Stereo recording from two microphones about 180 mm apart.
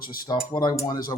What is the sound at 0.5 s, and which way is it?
Speech, 25° left (ahead or behind).